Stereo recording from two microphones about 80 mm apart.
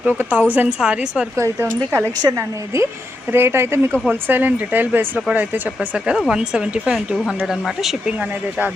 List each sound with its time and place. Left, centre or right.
0.0 s speech: right
0.8 s speech: centre
1.4 s a woman's voice: right
3.3 s a woman's voice: right
6.2 s speech: centre